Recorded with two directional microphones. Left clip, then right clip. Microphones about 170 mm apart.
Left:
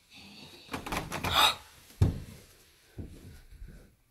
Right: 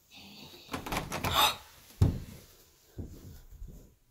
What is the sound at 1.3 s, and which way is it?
Gasp, 10° right (ahead or behind).